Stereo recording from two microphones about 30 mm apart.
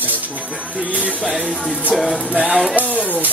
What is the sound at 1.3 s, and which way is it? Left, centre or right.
Music, right.